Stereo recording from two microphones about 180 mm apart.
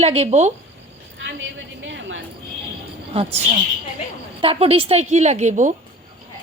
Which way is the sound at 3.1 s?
35° right (ahead or behind).